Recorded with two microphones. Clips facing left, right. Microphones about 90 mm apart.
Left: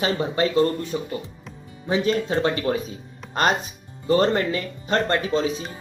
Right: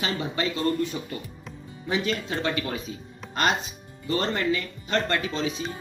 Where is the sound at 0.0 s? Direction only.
35° left (ahead or behind).